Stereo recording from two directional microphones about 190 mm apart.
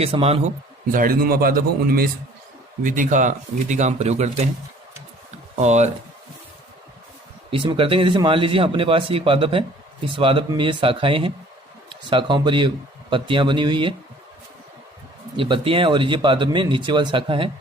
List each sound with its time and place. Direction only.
0.0 s speech: 30° right (ahead or behind)
0.9 s a man's voice: 45° right (ahead or behind)
5.5 s speech: 35° right (ahead or behind)
7.5 s speech: 25° right (ahead or behind)
15.4 s speech: 25° right (ahead or behind)